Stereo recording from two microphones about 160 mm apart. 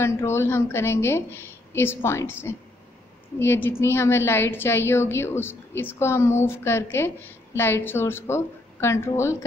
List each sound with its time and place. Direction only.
0.0 s a woman's voice: 15° left (ahead or behind)